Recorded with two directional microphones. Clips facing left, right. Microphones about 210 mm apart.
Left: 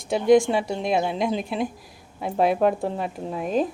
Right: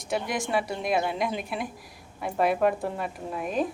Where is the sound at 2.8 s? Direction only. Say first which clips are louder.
Left 4 dB; 30° left (ahead or behind).